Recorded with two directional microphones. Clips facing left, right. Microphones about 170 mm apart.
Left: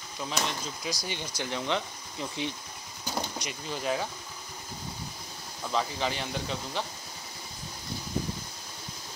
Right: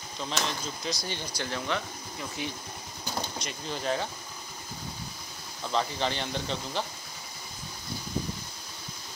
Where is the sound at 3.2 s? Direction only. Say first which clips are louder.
Left 1 dB; 15° left (ahead or behind).